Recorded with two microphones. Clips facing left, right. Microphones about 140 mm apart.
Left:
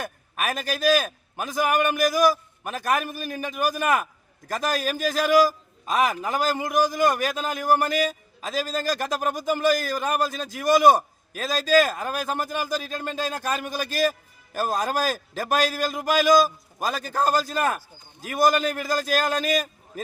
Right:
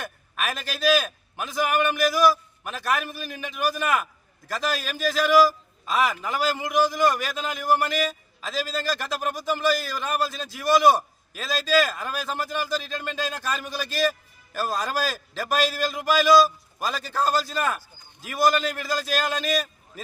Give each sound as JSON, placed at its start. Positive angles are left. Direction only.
{"t": 0.0, "sound": "a man's voice", "side_deg": 45}